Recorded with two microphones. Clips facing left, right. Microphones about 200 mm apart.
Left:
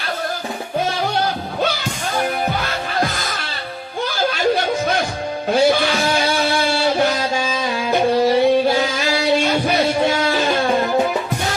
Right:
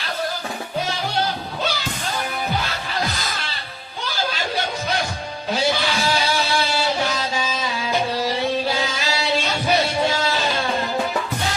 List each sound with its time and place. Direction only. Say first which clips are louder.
3.0 s music: left 3 dB; 50° left (ahead or behind)